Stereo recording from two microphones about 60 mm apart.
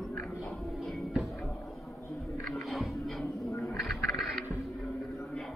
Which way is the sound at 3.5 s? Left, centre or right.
Left.